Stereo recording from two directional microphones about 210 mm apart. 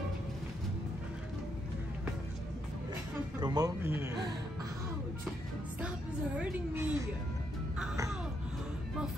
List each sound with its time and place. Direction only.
3.3 s a man's voice: 20° right (ahead or behind)
6.3 s a woman's voice: 10° right (ahead or behind)